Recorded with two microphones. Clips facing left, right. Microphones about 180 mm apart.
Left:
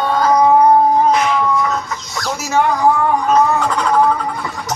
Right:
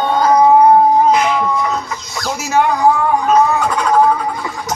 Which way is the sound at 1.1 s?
5° right (ahead or behind).